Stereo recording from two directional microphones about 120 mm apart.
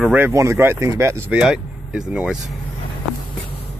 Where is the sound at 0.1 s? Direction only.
20° right (ahead or behind).